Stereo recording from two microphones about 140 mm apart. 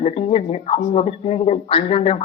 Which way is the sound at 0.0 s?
40° left (ahead or behind).